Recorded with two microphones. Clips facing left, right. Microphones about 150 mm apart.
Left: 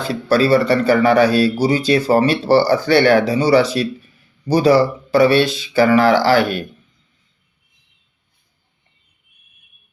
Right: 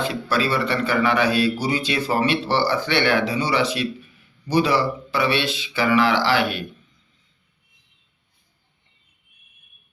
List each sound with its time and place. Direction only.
0.0 s speech: 40° left (ahead or behind)